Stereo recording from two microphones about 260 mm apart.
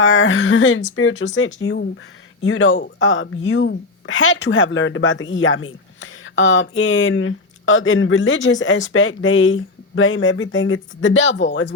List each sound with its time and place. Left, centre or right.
0.0 s speech: left